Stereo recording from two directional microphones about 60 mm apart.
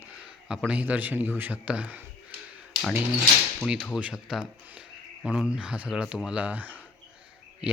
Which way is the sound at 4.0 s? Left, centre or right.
Centre.